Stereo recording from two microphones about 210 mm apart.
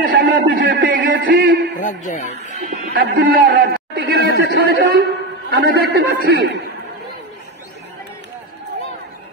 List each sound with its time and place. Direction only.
0.0 s a sound: 45° right (ahead or behind)
1.8 s speech: 40° left (ahead or behind)
2.9 s a man's voice: 45° right (ahead or behind)